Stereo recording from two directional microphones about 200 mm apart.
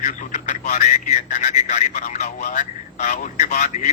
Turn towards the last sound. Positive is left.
turn(degrees=35)  # may be behind; listen again after turning